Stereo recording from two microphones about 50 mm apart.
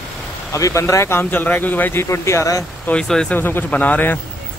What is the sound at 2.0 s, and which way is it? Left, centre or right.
Speech, left.